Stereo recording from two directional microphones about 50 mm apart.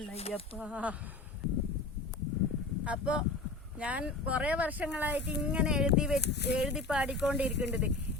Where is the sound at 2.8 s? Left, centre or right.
Right.